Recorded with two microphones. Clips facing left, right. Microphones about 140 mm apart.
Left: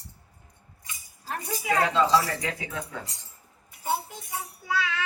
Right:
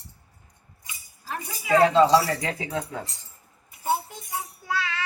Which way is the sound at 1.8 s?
30° right (ahead or behind).